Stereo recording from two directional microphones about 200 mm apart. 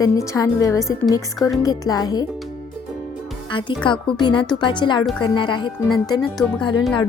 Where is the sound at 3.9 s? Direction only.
25° left (ahead or behind).